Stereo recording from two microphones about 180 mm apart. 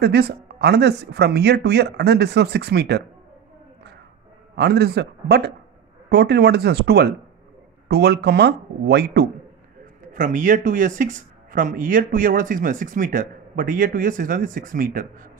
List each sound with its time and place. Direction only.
0.0 s speech: 65° right (ahead or behind)
4.6 s speech: 65° right (ahead or behind)
10.1 s speech: 45° right (ahead or behind)